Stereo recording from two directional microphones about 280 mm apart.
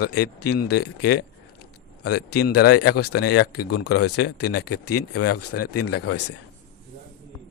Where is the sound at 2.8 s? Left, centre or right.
Left.